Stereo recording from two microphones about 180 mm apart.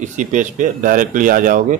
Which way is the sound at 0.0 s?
45° right (ahead or behind).